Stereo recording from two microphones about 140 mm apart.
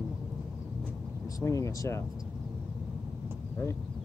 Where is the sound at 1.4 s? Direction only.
20° left (ahead or behind).